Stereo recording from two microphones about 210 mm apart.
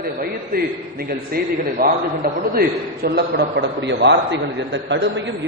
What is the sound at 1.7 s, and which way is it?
A man's voice, 45° right (ahead or behind).